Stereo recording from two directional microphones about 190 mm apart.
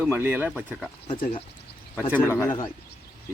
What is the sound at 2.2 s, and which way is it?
Speech, 10° left (ahead or behind).